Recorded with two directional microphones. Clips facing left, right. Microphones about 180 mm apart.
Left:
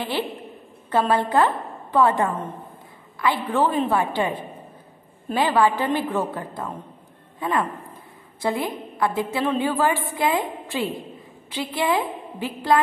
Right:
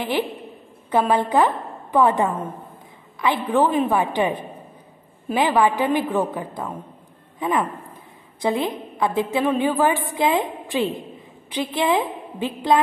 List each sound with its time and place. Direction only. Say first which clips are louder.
0.8 s a woman's voice: right 1 dB; 15° right (ahead or behind)